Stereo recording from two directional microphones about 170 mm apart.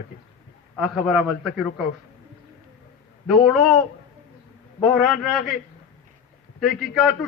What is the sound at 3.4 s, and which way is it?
Speech, centre (ahead or behind).